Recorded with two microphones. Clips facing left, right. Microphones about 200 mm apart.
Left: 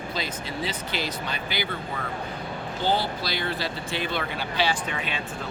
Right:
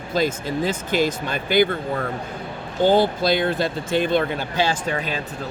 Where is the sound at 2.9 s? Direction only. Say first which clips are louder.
Right 11 dB; 50° right (ahead or behind).